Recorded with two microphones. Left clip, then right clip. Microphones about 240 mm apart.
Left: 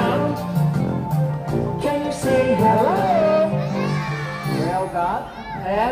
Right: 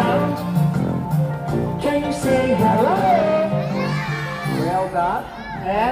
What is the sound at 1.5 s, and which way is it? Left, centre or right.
Music, left.